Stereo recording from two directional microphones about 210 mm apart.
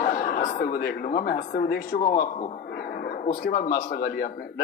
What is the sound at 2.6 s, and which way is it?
Speech, 45° left (ahead or behind).